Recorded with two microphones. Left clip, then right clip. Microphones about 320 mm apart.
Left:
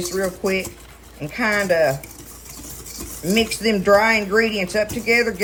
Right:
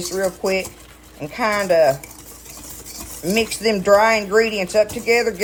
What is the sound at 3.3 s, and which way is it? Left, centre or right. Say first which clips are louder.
Speech: even; centre.